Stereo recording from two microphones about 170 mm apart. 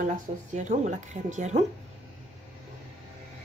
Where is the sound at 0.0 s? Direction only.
50° right (ahead or behind).